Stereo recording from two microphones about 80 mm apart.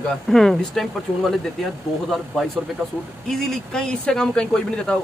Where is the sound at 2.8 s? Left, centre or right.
Centre.